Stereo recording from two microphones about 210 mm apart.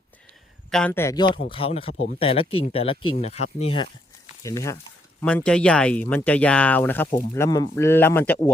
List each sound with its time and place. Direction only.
0.7 s speech: 5° left (ahead or behind)
1.5 s speech: 25° left (ahead or behind)
4.4 s speech: 15° left (ahead or behind)